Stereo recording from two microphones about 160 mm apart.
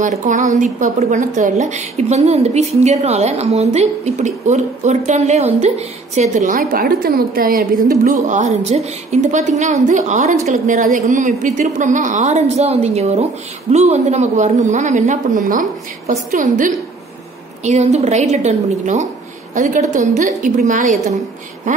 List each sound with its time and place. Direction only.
0.2 s a woman's voice: 50° right (ahead or behind)
17.6 s a woman's voice: 45° right (ahead or behind)